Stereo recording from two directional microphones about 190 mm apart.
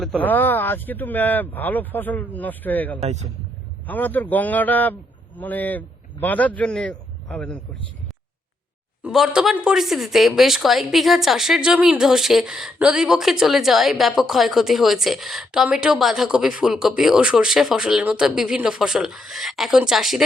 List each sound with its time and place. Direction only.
0.0 s speech: 5° left (ahead or behind)
3.0 s speech: 35° right (ahead or behind)
3.8 s a man's voice: 10° left (ahead or behind)
9.0 s speech: 5° right (ahead or behind)